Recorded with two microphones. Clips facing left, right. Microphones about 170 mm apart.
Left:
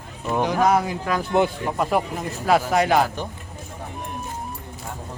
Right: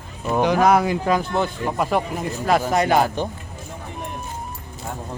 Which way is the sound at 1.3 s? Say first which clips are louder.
Left 3 dB; 15° left (ahead or behind).